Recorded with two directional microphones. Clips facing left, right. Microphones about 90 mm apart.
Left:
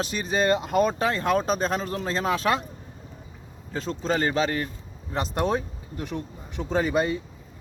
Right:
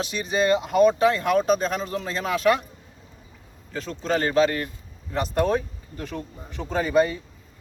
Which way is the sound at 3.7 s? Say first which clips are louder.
Even; 30° left (ahead or behind).